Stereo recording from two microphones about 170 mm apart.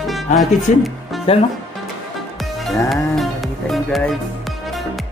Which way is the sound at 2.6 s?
Centre (ahead or behind).